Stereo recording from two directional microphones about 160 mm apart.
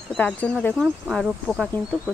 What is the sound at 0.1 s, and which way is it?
Speech, 5° left (ahead or behind).